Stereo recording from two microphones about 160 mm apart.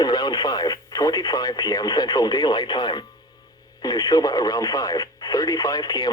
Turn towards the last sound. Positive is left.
turn(degrees=25)  # may be behind; listen again after turning